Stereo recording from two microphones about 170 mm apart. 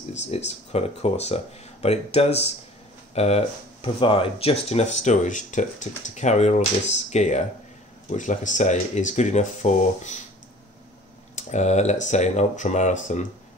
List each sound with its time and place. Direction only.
0.1 s speech: 40° left (ahead or behind)
11.3 s speech: 40° left (ahead or behind)